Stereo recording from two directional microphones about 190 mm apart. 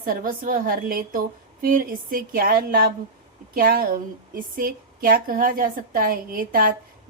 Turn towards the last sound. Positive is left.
turn(degrees=-50)  # may be behind; listen again after turning